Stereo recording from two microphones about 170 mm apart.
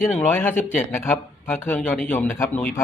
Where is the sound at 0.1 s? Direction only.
10° left (ahead or behind).